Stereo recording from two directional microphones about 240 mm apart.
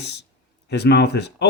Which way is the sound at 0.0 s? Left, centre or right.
Left.